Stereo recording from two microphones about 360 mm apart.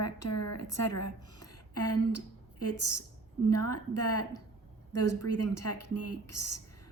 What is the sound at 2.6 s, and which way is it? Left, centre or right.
A woman's voice, left.